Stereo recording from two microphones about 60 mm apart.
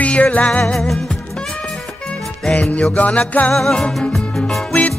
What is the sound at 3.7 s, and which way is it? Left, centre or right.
Music, centre.